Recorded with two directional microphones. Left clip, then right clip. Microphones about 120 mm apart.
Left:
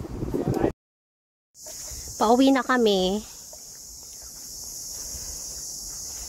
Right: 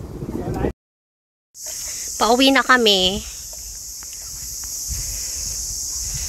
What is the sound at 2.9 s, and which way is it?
Speech, 25° left (ahead or behind).